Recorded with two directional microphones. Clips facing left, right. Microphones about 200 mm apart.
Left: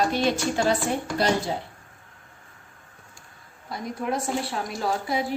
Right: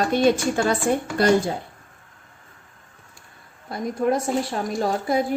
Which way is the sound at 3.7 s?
45° right (ahead or behind).